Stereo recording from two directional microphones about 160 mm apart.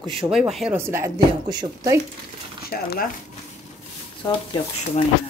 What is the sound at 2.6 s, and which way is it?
Speech, 70° left (ahead or behind).